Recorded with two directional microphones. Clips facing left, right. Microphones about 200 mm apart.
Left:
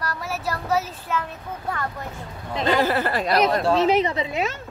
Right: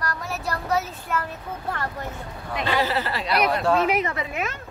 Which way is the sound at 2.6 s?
50° left (ahead or behind).